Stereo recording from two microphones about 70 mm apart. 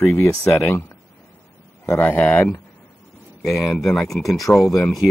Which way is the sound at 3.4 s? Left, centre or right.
Centre.